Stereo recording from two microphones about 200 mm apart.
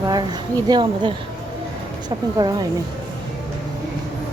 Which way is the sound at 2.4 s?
20° right (ahead or behind).